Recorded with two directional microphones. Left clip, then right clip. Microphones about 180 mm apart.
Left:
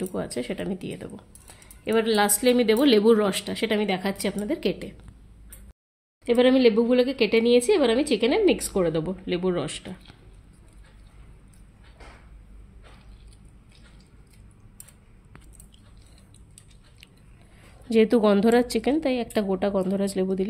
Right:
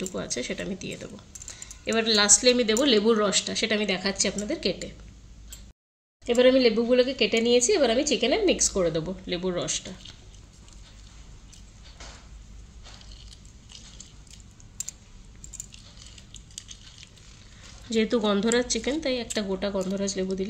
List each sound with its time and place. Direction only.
0.0 s a woman's voice: 50° left (ahead or behind)
6.2 s speech: 50° left (ahead or behind)
17.8 s a woman's voice: 50° left (ahead or behind)